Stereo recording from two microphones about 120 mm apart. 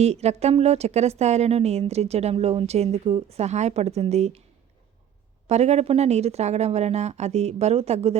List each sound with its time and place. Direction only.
0.0 s a woman's voice: 65° right (ahead or behind)
5.5 s a woman's voice: 65° right (ahead or behind)